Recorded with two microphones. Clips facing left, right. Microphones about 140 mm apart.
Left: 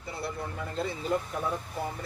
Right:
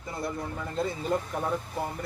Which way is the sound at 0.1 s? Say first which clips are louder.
Right 2 dB; 40° right (ahead or behind).